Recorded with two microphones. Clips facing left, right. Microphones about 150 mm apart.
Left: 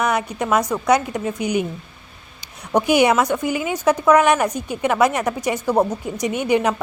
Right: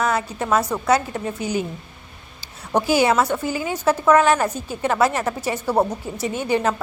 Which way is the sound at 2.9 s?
20° left (ahead or behind).